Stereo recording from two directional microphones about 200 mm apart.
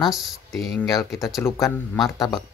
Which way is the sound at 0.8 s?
15° left (ahead or behind).